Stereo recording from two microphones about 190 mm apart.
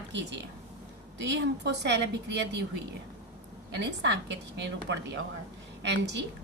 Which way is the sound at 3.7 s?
65° right (ahead or behind).